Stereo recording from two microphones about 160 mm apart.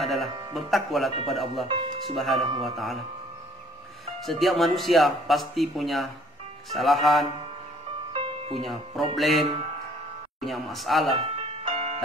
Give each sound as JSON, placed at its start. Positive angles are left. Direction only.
{"t": 0.0, "sound": "electric shaver", "side_deg": 0}
{"t": 0.6, "sound": "speech", "side_deg": 0}
{"t": 1.7, "sound": "speech", "side_deg": -35}
{"t": 2.1, "sound": "speech", "side_deg": 0}
{"t": 4.2, "sound": "speech", "side_deg": 0}
{"t": 8.1, "sound": "music", "side_deg": -35}
{"t": 8.5, "sound": "speech", "side_deg": 0}
{"t": 10.4, "sound": "speech", "side_deg": 0}
{"t": 11.6, "sound": "music", "side_deg": -40}